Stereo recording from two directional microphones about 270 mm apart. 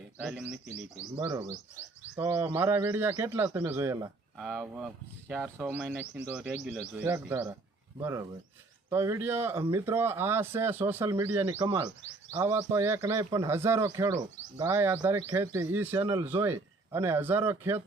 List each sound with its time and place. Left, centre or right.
0.2 s speech: centre
1.1 s speech: centre